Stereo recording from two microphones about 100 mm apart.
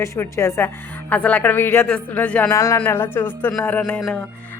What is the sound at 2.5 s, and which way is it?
Speech, 30° left (ahead or behind).